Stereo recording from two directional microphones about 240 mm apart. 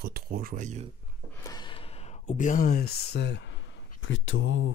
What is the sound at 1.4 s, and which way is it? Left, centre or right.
Speech, centre.